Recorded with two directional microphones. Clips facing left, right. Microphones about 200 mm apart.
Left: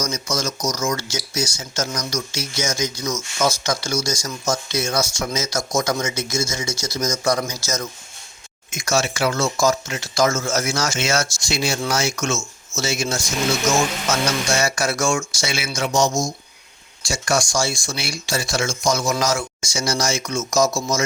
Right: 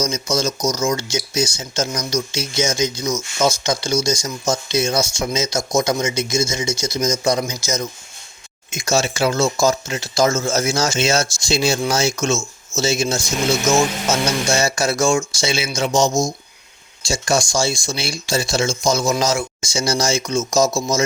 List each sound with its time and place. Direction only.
0.7 s speech: 25° right (ahead or behind)